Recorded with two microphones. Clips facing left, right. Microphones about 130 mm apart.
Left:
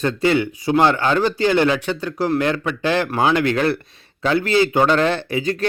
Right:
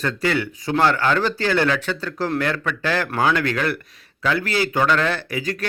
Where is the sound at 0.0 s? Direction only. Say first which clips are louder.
Left 4 dB; 20° left (ahead or behind).